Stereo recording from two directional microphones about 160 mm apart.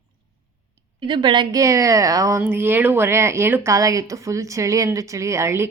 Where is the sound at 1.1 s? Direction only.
30° right (ahead or behind).